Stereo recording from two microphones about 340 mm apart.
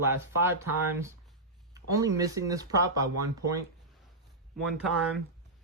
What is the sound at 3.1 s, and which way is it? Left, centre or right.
Speech, right.